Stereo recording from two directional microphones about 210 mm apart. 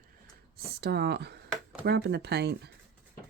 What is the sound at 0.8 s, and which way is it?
Speech, 50° right (ahead or behind).